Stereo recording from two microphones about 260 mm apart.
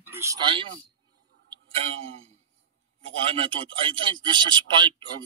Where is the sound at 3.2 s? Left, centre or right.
Right.